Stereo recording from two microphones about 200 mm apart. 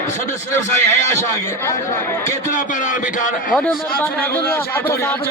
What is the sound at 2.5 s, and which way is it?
A man's voice, 40° left (ahead or behind).